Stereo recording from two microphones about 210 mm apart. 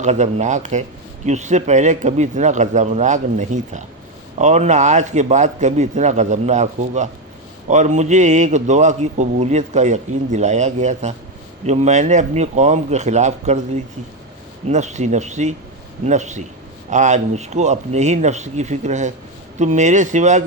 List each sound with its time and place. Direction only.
0.0 s a man's voice: 35° right (ahead or behind)
14.7 s a man's voice: 35° right (ahead or behind)